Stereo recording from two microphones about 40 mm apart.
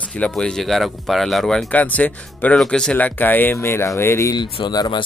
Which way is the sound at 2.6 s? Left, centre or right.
Left.